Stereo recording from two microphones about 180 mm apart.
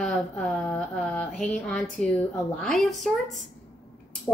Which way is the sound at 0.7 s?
5° left (ahead or behind).